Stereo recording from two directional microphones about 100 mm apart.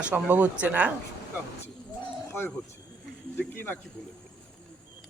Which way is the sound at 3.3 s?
20° left (ahead or behind).